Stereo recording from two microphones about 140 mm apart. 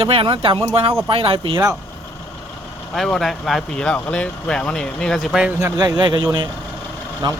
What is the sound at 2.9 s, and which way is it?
Speech, 5° left (ahead or behind).